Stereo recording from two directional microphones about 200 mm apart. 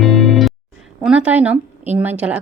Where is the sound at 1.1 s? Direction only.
5° right (ahead or behind).